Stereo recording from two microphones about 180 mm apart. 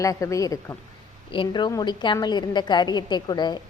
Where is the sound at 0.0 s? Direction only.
15° left (ahead or behind).